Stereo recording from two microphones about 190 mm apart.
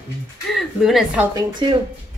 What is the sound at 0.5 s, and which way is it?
Speech, centre (ahead or behind).